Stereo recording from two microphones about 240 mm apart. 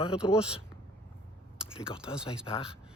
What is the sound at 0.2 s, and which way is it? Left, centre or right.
Speech, centre.